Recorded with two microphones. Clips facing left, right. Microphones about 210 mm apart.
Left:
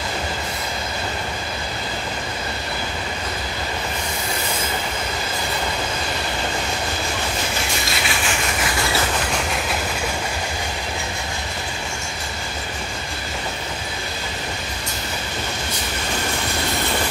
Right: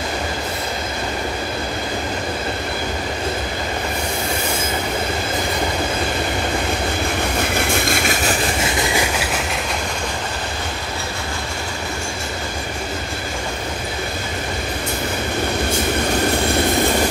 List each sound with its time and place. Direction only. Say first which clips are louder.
7.5 s vehicle: right 6 dB; 55° right (ahead or behind)
8.6 s train: right 3 dB; 20° right (ahead or behind)